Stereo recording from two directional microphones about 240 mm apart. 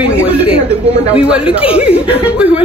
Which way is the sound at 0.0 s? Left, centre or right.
Centre.